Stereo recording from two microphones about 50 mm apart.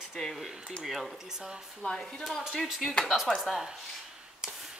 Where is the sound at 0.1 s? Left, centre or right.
Centre.